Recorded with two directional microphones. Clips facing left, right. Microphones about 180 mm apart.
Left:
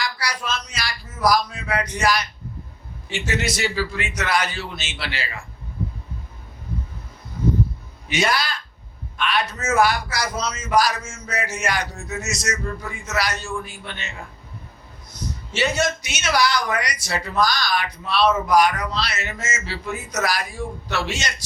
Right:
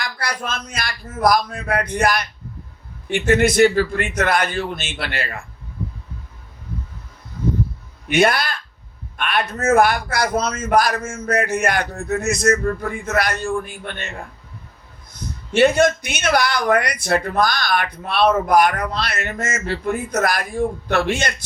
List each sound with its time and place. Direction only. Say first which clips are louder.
0.0 s a man's voice: right 1 dB; 55° right (ahead or behind)
8.0 s speech: right 6 dB; 55° right (ahead or behind)
15.5 s speech: right 8 dB; 55° right (ahead or behind)